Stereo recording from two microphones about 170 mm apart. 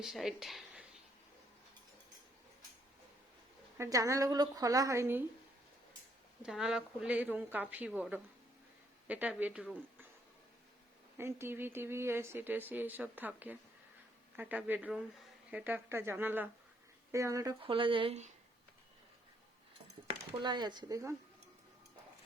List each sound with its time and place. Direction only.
0.0 s speech: centre (ahead or behind)
3.8 s a woman's voice: 20° right (ahead or behind)
6.4 s a woman's voice: 5° right (ahead or behind)
11.2 s a woman's voice: 15° right (ahead or behind)
17.6 s speech: 30° right (ahead or behind)
20.1 s a woman's voice: 25° right (ahead or behind)